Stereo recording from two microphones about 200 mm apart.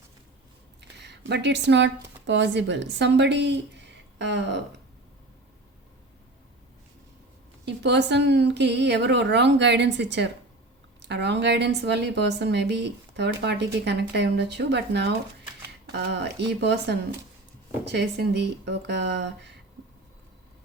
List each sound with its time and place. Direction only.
0.8 s speech: 60° right (ahead or behind)
7.6 s a woman's voice: 60° right (ahead or behind)
16.5 s a woman's voice: 60° right (ahead or behind)